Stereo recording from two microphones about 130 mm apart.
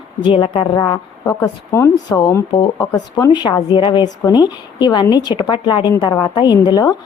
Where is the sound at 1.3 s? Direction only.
20° left (ahead or behind).